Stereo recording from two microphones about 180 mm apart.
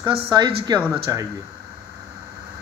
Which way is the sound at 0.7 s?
20° right (ahead or behind).